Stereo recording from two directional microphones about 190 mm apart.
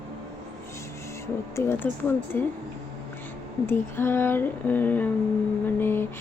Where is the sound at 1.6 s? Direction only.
10° left (ahead or behind).